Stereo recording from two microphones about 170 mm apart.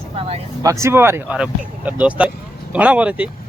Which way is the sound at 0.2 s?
35° right (ahead or behind).